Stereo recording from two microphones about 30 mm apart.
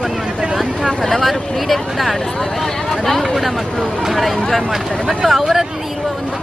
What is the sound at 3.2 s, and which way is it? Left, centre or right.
Speech, centre.